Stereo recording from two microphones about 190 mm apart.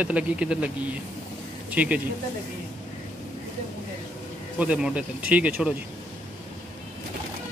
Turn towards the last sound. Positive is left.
turn(degrees=-5)  # may be behind; listen again after turning